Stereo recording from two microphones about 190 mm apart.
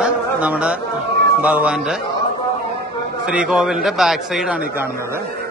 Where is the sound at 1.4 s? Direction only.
5° right (ahead or behind).